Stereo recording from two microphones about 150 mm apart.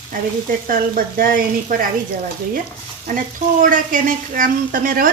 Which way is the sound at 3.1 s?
60° right (ahead or behind).